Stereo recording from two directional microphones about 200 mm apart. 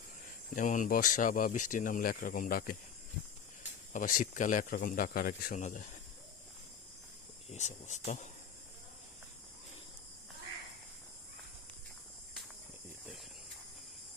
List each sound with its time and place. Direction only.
0.5 s speech: 40° left (ahead or behind)
3.9 s speech: 40° left (ahead or behind)
7.5 s speech: 35° left (ahead or behind)